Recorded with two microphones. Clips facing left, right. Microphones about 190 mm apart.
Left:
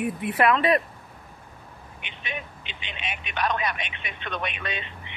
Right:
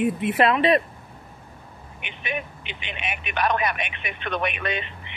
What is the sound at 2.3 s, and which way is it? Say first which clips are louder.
Speech: right 6 dB; 60° right (ahead or behind).